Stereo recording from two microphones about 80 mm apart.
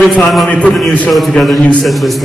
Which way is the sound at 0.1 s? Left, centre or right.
Centre.